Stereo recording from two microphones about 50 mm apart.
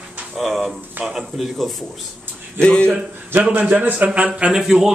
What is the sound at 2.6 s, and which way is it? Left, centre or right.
Speech, centre.